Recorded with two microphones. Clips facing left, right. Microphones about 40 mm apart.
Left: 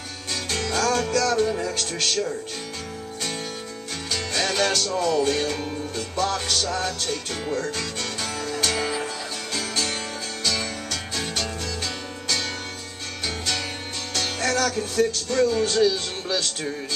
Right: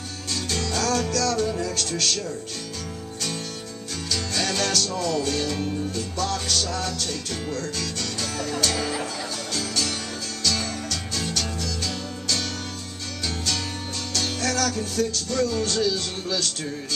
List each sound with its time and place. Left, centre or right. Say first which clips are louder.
0.3 s music: left 1 dB; centre
4.1 s music: left 1 dB; centre
5.6 s music: right 2 dB; centre
5.9 s music: left 2 dB; left
14.1 s music: left 2 dB; centre